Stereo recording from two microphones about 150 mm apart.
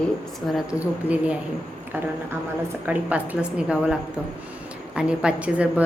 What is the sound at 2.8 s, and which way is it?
A woman's voice, 10° right (ahead or behind).